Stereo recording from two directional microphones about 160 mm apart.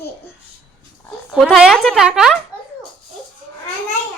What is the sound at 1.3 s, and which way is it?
A woman's voice, 5° right (ahead or behind).